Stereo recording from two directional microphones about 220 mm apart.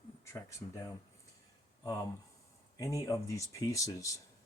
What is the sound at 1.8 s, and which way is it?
Speech, 15° left (ahead or behind).